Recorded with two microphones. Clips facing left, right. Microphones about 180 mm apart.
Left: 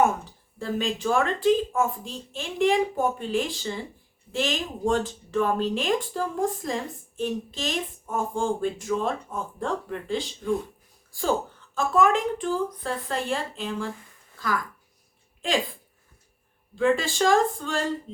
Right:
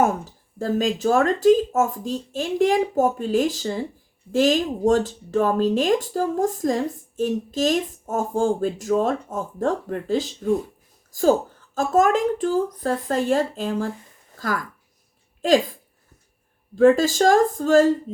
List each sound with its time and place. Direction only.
0.0 s speech: 40° right (ahead or behind)
16.7 s speech: 45° right (ahead or behind)